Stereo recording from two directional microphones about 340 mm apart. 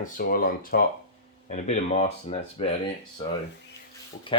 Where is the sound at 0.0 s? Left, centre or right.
Left.